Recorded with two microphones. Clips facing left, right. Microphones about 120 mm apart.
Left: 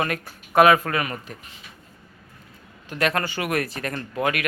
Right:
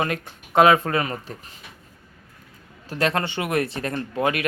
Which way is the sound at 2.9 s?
25° right (ahead or behind).